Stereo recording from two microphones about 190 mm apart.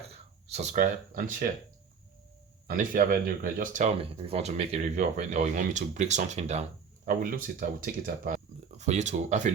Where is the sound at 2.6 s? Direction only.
45° right (ahead or behind).